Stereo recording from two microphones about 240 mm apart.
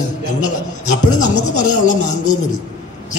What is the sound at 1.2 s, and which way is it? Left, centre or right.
A man's voice, left.